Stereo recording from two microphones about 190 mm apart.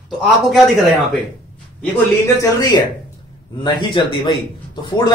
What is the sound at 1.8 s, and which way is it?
Speech, 15° left (ahead or behind).